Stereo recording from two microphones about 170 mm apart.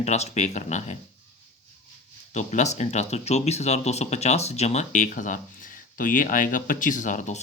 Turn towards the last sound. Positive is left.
turn(degrees=45)  # may be behind; listen again after turning